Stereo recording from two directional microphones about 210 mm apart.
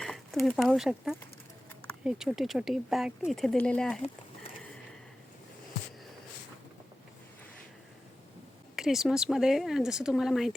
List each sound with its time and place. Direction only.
0.0 s speech: centre (ahead or behind)
8.7 s speech: centre (ahead or behind)